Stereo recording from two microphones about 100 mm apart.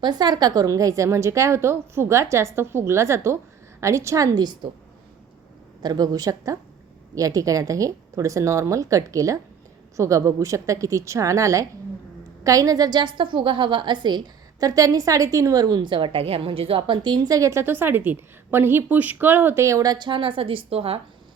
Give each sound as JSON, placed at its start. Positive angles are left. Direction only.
{"t": 0.0, "sound": "a woman's voice", "side_deg": -45}
{"t": 5.8, "sound": "a woman's voice", "side_deg": -40}
{"t": 20.1, "sound": "a woman's voice", "side_deg": -60}